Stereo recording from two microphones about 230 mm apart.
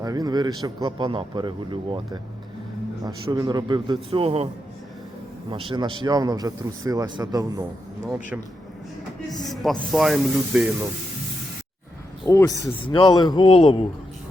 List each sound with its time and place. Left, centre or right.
0.0 s a man's voice: centre
3.0 s a man's voice: centre
5.5 s a man's voice: right
9.4 s speech: centre
12.2 s speech: centre